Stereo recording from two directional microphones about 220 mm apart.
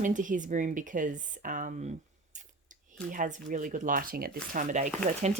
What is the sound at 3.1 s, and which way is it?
Speech, 35° right (ahead or behind).